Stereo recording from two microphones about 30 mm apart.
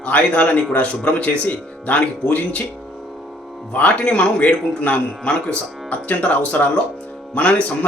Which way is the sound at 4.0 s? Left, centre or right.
Left.